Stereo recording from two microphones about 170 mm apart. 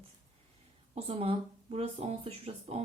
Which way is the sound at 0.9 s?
35° right (ahead or behind).